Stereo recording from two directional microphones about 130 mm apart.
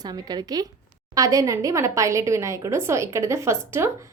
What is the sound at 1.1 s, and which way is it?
Speech, 25° right (ahead or behind).